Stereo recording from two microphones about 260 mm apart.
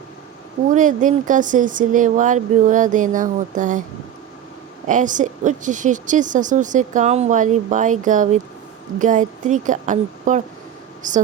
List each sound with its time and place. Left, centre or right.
0.7 s a woman's voice: right
4.9 s a woman's voice: right